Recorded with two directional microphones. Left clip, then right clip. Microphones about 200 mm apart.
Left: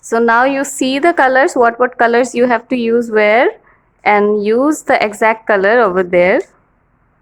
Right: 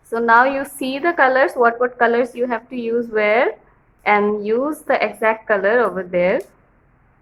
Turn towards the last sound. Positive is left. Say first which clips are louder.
# left 7 dB
turn(degrees=50)  # may be behind; listen again after turning